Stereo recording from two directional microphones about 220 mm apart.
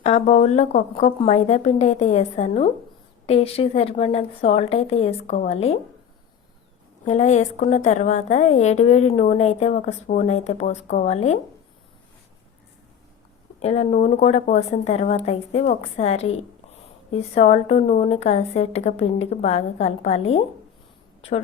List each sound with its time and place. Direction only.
0.0 s a woman's voice: 30° left (ahead or behind)
7.0 s a woman's voice: 30° left (ahead or behind)
13.6 s a woman's voice: 30° left (ahead or behind)